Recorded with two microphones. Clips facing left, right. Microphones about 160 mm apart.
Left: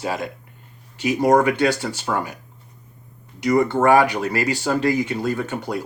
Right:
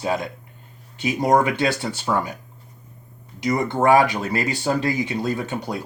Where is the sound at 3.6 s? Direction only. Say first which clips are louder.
Even; 20° right (ahead or behind).